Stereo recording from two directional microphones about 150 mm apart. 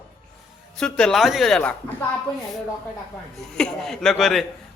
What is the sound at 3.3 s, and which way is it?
A man's voice, 5° left (ahead or behind).